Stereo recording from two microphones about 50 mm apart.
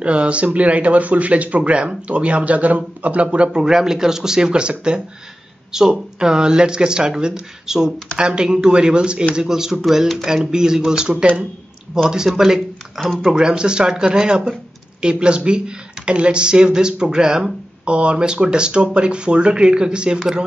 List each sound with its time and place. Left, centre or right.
0.0 s speech: right; by 10.3 s centre
10.3 s speech: centre